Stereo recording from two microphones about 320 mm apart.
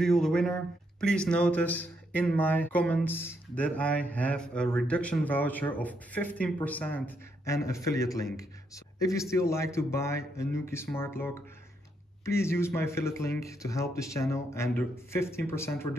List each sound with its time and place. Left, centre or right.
0.0 s speech: centre